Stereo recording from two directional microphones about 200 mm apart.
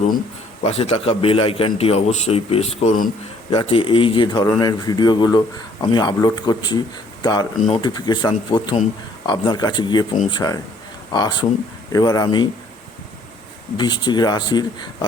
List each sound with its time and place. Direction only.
0.6 s a man's voice: 30° left (ahead or behind)
3.5 s a man's voice: 25° left (ahead or behind)
13.7 s a man's voice: 20° left (ahead or behind)